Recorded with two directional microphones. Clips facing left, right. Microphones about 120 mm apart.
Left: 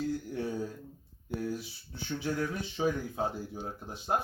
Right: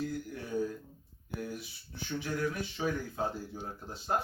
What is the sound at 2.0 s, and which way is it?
Speech, 25° left (ahead or behind).